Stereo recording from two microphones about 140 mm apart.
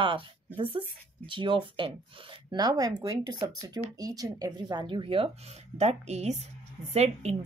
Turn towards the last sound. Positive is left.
turn(degrees=-50)  # may be behind; listen again after turning